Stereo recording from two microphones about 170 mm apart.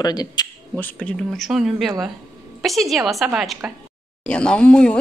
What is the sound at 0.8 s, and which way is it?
Speech, 10° left (ahead or behind).